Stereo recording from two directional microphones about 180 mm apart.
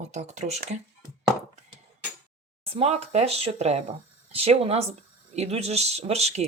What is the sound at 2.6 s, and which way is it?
Speech, 35° right (ahead or behind).